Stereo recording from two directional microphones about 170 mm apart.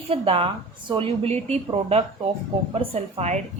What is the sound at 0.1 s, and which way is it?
A woman's voice, 35° right (ahead or behind).